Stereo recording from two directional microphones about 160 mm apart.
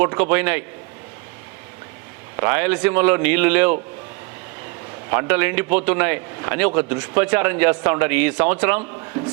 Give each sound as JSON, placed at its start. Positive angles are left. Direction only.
{"t": 0.0, "sound": "a man's voice", "side_deg": -10}
{"t": 2.3, "sound": "a man's voice", "side_deg": -15}
{"t": 5.1, "sound": "a man's voice", "side_deg": -10}